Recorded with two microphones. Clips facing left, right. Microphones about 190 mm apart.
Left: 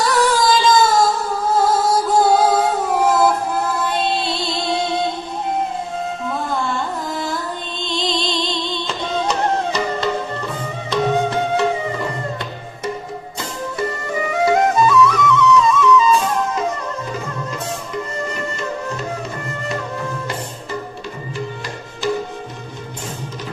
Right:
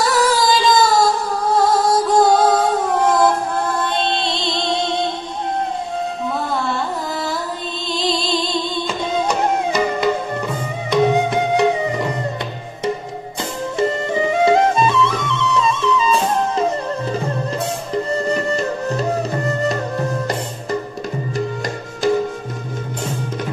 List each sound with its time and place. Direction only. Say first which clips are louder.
0.0 s music: even; centre (ahead or behind)
2.2 s music: right 1 dB; 10° left (ahead or behind)
6.2 s music: even; centre (ahead or behind)
7.8 s music: right 1 dB; 5° right (ahead or behind)
13.7 s music: right 5 dB; 25° right (ahead or behind)